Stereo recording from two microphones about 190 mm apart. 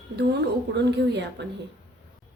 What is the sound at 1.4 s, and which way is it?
Speech, 65° right (ahead or behind).